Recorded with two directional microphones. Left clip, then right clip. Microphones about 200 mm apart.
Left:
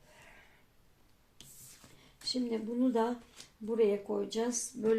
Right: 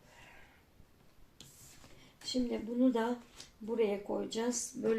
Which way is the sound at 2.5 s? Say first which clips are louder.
Right 2 dB; 35° left (ahead or behind).